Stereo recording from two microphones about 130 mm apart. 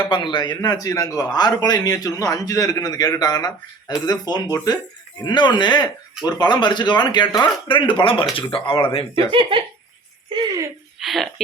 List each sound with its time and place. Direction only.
0.0 s a man's voice: 40° left (ahead or behind)
9.1 s speech: 45° right (ahead or behind)
11.0 s speech: centre (ahead or behind)